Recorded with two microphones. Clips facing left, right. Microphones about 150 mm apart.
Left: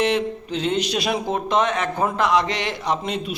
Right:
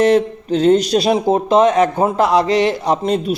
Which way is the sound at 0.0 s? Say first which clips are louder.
Right 8 dB; 40° right (ahead or behind).